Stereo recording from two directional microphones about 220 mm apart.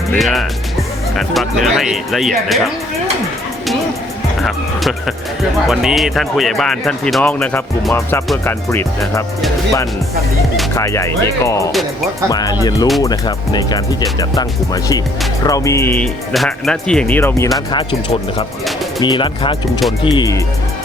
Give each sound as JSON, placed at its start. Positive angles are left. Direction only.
{"t": 0.1, "sound": "speech", "side_deg": 0}
{"t": 4.4, "sound": "speech", "side_deg": 0}
{"t": 10.8, "sound": "speech", "side_deg": 15}
{"t": 17.7, "sound": "speech", "side_deg": 25}